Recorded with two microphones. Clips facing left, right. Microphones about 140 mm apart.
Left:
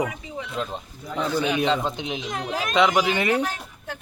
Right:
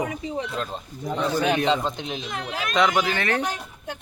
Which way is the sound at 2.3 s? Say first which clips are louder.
Left 4 dB; 40° left (ahead or behind).